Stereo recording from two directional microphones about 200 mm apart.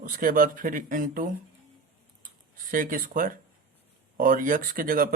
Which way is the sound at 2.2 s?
40° right (ahead or behind).